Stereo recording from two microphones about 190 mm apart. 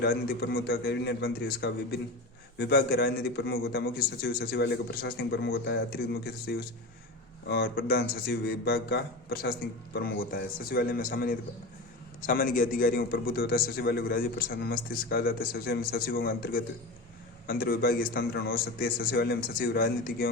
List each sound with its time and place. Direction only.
0.0 s a man's voice: 55° left (ahead or behind)